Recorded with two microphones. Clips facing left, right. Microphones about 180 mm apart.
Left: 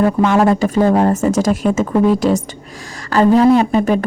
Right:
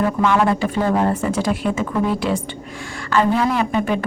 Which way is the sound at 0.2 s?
40° left (ahead or behind).